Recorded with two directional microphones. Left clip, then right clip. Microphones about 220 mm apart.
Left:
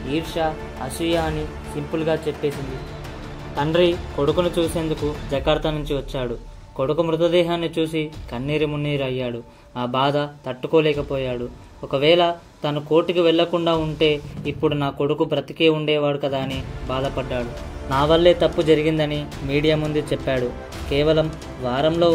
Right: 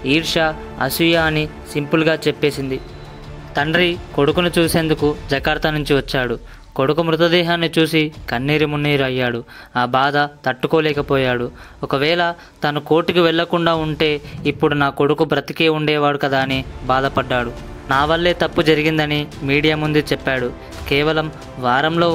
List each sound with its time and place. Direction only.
0.1 s speech: 30° right (ahead or behind)
3.5 s speech: 35° right (ahead or behind)